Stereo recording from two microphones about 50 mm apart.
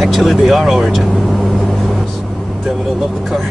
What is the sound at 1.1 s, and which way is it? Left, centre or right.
Vehicle, left.